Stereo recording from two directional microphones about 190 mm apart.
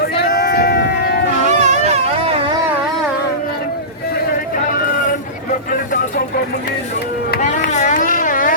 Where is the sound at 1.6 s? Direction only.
35° right (ahead or behind).